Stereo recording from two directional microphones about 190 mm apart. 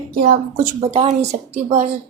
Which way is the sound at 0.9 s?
35° right (ahead or behind).